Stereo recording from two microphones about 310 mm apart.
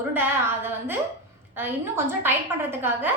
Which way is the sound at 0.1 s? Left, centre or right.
Centre.